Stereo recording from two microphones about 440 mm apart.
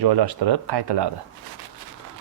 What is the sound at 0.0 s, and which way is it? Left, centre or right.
Speech, right.